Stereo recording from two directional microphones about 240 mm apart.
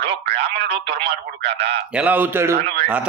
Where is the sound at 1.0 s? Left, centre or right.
Right.